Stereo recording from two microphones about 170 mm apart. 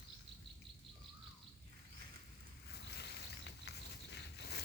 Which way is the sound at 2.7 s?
80° left.